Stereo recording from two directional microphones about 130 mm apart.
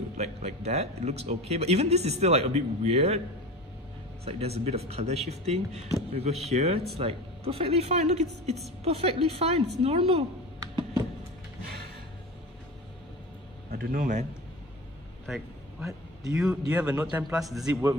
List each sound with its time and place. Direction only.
0.2 s speech: 60° right (ahead or behind)
4.2 s speech: 50° right (ahead or behind)
10.6 s a sound: 25° right (ahead or behind)
13.9 s a man's voice: 80° right
16.3 s a man's voice: 5° right (ahead or behind)